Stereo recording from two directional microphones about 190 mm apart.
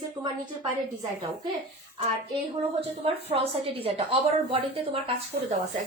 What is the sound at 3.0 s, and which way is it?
A woman's voice, 30° right (ahead or behind).